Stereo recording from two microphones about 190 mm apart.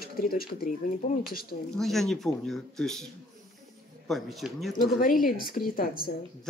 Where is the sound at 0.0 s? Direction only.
50° left (ahead or behind).